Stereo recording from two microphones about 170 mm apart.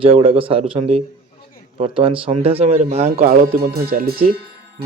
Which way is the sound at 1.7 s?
35° right (ahead or behind).